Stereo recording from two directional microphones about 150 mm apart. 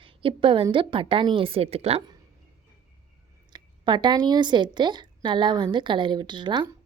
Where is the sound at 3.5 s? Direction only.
30° right (ahead or behind).